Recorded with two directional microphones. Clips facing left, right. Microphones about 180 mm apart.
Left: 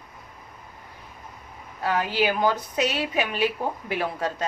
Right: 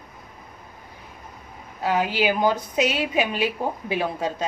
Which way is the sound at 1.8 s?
15° right (ahead or behind).